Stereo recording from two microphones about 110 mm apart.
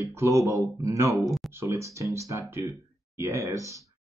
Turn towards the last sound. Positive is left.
turn(degrees=-25)  # may be behind; listen again after turning